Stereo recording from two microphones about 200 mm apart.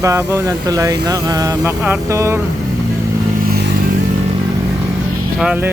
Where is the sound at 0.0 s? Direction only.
15° right (ahead or behind).